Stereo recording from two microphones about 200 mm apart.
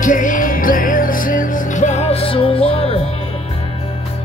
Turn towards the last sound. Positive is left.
turn(degrees=30)  # may be behind; listen again after turning